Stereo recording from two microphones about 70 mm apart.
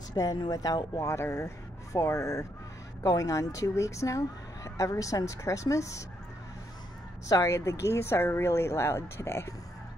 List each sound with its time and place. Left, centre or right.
0.1 s speech: left
1.0 s speech: left
3.0 s speech: left
7.4 s speech: left